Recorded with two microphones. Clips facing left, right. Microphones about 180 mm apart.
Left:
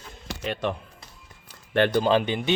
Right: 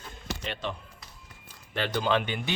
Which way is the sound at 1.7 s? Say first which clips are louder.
Left 10 dB; 55° left (ahead or behind).